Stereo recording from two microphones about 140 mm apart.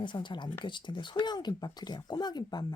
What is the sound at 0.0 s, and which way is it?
A woman's voice, 35° left (ahead or behind).